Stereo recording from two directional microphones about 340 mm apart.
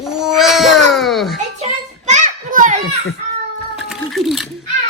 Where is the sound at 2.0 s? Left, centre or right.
Right.